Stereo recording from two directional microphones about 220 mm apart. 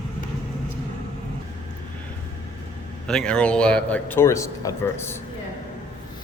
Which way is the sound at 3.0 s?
5° left (ahead or behind).